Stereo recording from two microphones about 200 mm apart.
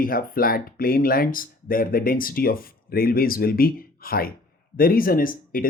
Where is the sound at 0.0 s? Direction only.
45° left (ahead or behind).